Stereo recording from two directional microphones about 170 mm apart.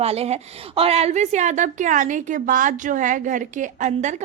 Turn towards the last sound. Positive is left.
turn(degrees=-45)  # may be behind; listen again after turning